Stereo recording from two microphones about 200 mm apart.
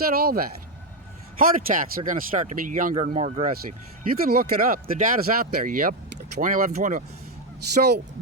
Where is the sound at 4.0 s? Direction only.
45° right (ahead or behind).